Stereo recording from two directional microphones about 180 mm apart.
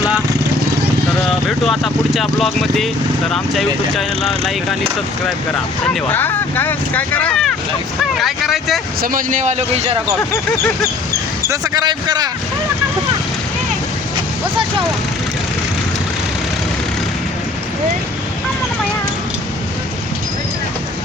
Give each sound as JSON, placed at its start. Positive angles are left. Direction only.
{"t": 1.5, "sound": "speech", "side_deg": 0}
{"t": 5.8, "sound": "speech", "side_deg": 10}
{"t": 9.0, "sound": "speech", "side_deg": -45}
{"t": 11.4, "sound": "speech", "side_deg": -20}